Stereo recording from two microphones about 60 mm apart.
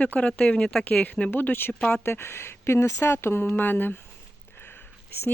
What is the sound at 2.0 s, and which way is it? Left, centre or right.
Speech, left.